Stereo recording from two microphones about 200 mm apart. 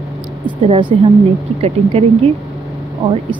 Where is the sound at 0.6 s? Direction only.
25° right (ahead or behind).